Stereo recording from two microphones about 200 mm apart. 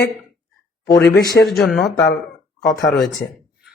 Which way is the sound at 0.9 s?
55° left (ahead or behind).